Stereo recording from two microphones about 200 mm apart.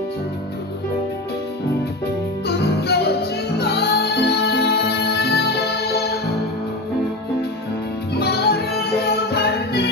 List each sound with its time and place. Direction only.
2.4 s music: 55° left (ahead or behind)
8.2 s music: 55° left (ahead or behind)